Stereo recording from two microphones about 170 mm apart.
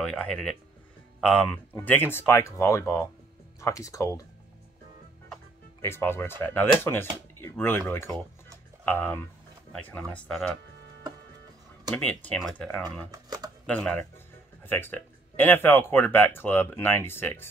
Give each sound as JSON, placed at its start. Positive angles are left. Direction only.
{"t": 0.0, "sound": "speech", "side_deg": 5}
{"t": 5.8, "sound": "speech", "side_deg": 15}
{"t": 11.9, "sound": "speech", "side_deg": 10}
{"t": 13.1, "sound": "a sound", "side_deg": -25}
{"t": 13.7, "sound": "speech", "side_deg": 10}